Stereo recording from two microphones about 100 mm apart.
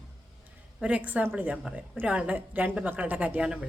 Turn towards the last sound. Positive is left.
turn(degrees=-10)  # may be behind; listen again after turning